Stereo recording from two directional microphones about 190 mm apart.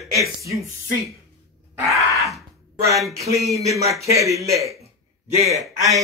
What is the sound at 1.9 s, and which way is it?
Groan, centre (ahead or behind).